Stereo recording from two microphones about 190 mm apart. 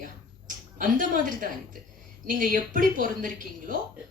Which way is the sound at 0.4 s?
45° right (ahead or behind).